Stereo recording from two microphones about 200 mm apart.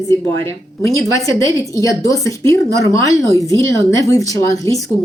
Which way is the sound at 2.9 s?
15° left (ahead or behind).